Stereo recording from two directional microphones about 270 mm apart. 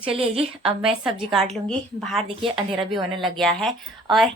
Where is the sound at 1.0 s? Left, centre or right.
Centre.